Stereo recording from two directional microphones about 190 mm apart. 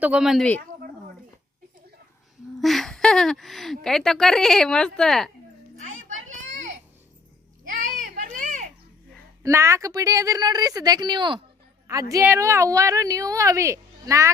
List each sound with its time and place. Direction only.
0.0 s speech: 5° right (ahead or behind)
2.6 s speech: centre (ahead or behind)
7.7 s children playing: 45° right (ahead or behind)
9.4 s a woman's voice: 15° right (ahead or behind)